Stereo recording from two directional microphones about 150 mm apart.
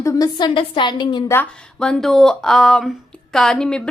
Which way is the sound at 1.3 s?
10° left (ahead or behind).